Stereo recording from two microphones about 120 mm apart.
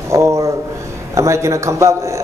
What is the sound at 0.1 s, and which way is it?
A man's voice, 25° right (ahead or behind).